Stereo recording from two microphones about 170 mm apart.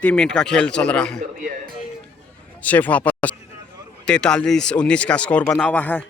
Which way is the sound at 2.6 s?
10° left (ahead or behind).